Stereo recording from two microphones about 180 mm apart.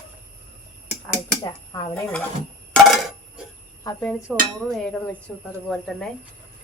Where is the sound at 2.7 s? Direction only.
Centre (ahead or behind).